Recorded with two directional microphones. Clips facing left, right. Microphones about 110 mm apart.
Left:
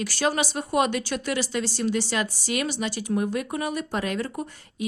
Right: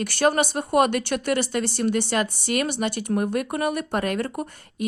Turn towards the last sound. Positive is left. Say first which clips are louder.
# right 2 dB
turn(degrees=-55)  # may be behind; listen again after turning